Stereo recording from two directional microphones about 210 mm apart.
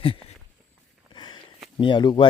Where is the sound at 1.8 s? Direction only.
20° left (ahead or behind).